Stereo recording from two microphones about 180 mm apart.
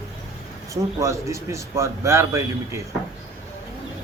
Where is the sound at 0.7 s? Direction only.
15° right (ahead or behind).